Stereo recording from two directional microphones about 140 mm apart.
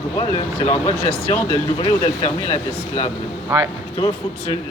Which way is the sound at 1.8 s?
35° left (ahead or behind).